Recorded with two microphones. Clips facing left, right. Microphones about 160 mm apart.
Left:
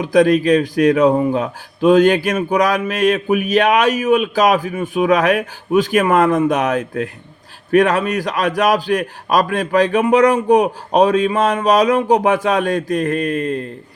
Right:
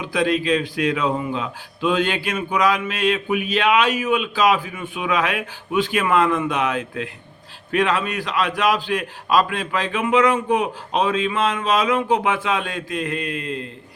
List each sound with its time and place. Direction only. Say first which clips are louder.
0.0 s a man's voice: left 8 dB; 40° left (ahead or behind)